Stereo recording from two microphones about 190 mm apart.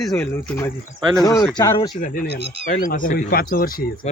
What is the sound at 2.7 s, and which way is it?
Speech, 45° left (ahead or behind).